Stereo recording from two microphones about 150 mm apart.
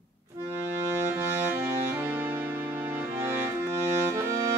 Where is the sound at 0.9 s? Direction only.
15° right (ahead or behind).